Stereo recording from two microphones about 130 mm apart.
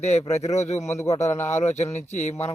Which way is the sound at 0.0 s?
55° left (ahead or behind).